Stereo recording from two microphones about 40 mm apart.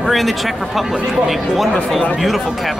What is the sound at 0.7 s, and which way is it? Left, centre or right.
Speech, centre.